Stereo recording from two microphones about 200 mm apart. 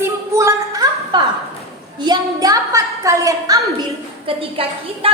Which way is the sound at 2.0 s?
15° right (ahead or behind).